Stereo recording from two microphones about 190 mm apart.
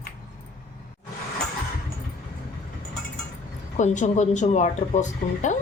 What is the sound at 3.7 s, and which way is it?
Speech, 40° left (ahead or behind).